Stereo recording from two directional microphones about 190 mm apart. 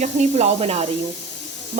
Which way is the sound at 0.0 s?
35° right (ahead or behind).